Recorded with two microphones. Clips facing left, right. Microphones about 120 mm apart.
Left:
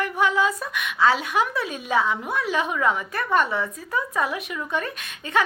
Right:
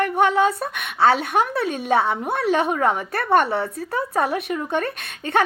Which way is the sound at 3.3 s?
65° right (ahead or behind).